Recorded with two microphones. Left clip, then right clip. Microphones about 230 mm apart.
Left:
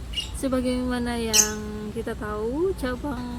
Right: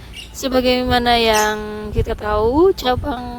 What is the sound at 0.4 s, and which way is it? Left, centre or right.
Speech, right.